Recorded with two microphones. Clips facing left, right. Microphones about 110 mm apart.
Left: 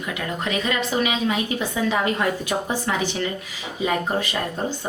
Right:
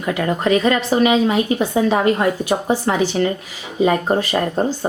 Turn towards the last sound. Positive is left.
turn(degrees=-40)  # may be behind; listen again after turning